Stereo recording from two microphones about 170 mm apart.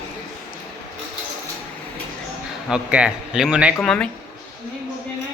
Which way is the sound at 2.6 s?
5° right (ahead or behind).